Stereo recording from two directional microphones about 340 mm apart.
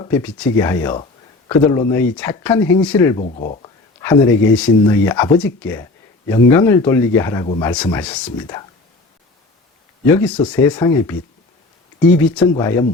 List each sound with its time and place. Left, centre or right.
0.0 s speech: centre
3.2 s speech: left
4.0 s speech: centre
7.4 s speech: centre
7.7 s speech: centre
10.2 s speech: centre
12.3 s speech: centre